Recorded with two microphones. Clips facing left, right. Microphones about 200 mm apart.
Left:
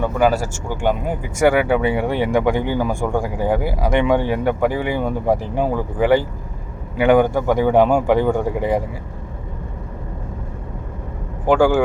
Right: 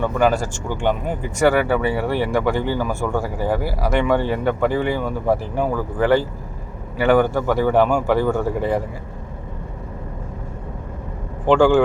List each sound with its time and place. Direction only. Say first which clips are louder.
0.0 s speech: left 1 dB; 10° left (ahead or behind)
11.4 s speech: right 1 dB; 10° left (ahead or behind)